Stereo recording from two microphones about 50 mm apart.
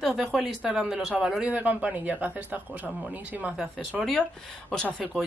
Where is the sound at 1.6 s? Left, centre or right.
Right.